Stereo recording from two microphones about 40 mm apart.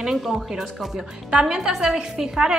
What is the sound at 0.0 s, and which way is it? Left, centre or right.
A woman's voice, centre.